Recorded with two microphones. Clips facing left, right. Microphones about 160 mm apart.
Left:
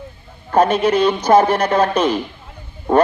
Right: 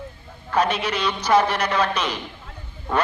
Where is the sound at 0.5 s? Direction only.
50° left (ahead or behind).